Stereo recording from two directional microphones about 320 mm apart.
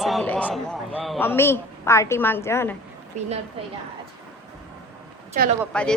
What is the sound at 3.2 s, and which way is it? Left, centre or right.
Speech, right.